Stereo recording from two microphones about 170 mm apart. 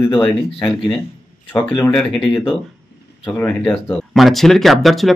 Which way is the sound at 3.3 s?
10° left (ahead or behind).